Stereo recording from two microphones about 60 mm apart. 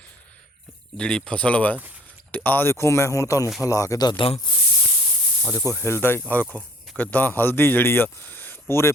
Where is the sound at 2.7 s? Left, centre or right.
Left.